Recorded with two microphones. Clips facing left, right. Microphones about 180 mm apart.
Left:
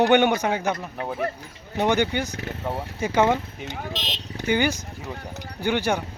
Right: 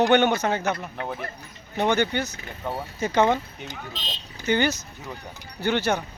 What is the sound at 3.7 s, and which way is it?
Speech, 90° left.